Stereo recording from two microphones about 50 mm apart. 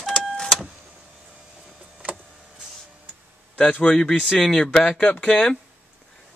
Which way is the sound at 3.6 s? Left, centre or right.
Centre.